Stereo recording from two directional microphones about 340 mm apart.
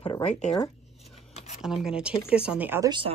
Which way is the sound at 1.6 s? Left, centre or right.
Centre.